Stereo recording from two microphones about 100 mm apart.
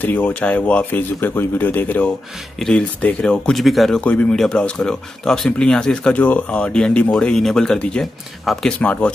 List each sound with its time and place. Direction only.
0.0 s speech: 20° left (ahead or behind); by 4.0 s centre (ahead or behind)
4.0 s speech: 15° left (ahead or behind)